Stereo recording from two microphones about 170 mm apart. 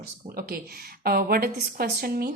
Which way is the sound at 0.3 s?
60° right (ahead or behind).